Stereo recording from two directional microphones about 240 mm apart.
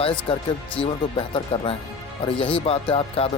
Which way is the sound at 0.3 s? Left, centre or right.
Left.